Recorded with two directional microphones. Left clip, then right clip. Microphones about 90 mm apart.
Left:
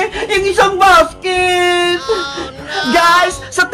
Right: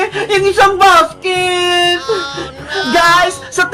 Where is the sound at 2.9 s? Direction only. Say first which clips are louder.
Even; 50° left (ahead or behind).